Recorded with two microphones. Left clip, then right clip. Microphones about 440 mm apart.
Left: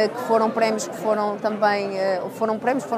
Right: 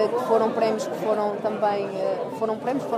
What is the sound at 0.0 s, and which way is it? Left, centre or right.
A woman's voice, left.